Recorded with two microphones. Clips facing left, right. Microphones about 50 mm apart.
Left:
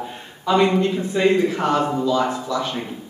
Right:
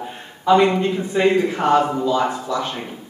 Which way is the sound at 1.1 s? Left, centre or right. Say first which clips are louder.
Right 1 dB; right.